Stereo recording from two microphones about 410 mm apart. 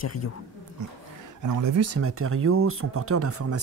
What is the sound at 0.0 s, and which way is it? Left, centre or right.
Speech, left.